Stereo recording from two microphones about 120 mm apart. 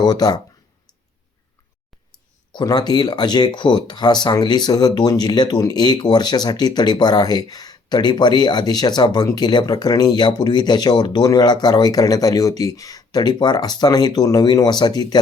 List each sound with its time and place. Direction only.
0.0 s speech: 35° left (ahead or behind)
2.5 s speech: 40° left (ahead or behind)